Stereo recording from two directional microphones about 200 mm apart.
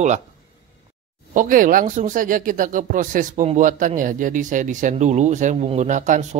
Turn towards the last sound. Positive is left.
turn(degrees=-40)  # may be behind; listen again after turning